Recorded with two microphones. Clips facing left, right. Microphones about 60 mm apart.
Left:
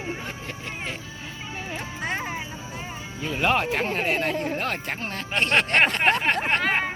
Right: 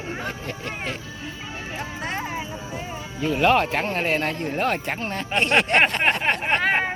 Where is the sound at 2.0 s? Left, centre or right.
Centre.